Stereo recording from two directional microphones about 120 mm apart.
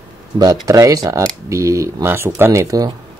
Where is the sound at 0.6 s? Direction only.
30° right (ahead or behind).